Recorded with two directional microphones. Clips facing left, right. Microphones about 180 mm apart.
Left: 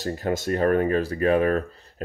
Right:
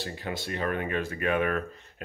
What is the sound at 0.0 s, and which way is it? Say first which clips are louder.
Speech: left 9 dB; 45° left (ahead or behind).